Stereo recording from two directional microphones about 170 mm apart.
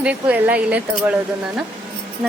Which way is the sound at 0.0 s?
10° right (ahead or behind).